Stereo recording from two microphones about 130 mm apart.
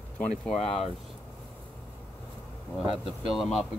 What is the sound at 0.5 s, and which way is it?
Speech, 50° left (ahead or behind).